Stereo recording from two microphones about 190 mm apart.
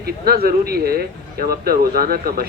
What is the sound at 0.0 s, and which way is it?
Speech, 55° right (ahead or behind).